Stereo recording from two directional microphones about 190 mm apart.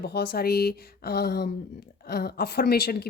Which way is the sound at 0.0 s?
55° left (ahead or behind).